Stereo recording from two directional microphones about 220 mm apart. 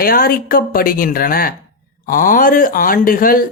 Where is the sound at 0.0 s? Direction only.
40° left (ahead or behind).